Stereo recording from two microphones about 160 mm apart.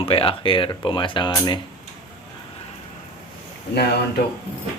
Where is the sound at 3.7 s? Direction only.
90° left.